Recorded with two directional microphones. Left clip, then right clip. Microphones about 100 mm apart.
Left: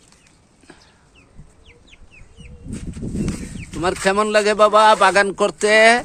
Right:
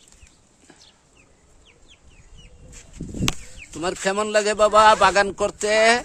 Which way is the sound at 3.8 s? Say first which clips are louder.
Left 5 dB; 10° right (ahead or behind).